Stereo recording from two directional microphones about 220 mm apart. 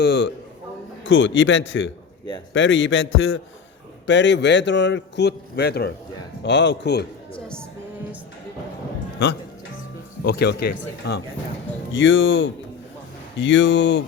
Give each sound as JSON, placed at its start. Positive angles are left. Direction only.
{"t": 0.0, "sound": "a man's voice", "side_deg": 50}
{"t": 4.0, "sound": "a man's voice", "side_deg": 55}
{"t": 7.3, "sound": "music", "side_deg": 5}
{"t": 10.2, "sound": "a man's voice", "side_deg": 45}
{"t": 11.9, "sound": "a man's voice", "side_deg": 60}